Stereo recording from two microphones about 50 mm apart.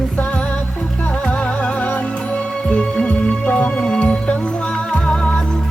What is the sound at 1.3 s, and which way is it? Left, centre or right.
Music, left.